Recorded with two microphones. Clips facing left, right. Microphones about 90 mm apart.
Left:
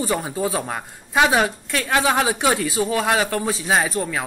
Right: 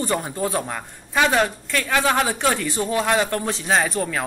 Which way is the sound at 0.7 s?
20° left (ahead or behind).